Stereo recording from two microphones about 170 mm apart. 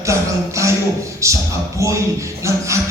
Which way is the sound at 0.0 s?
15° right (ahead or behind).